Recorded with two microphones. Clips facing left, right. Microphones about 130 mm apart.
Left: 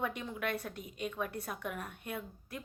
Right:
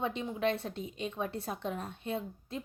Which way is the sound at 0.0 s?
25° right (ahead or behind).